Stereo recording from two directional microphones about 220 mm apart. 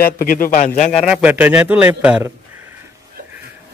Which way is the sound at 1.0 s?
5° right (ahead or behind).